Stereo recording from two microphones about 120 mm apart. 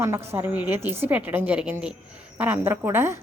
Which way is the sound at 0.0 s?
20° right (ahead or behind).